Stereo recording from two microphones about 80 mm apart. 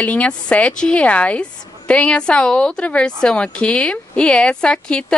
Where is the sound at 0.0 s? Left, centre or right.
Centre.